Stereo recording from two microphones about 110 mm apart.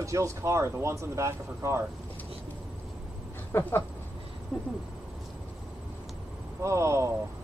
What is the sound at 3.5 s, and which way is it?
Speech, 20° left (ahead or behind).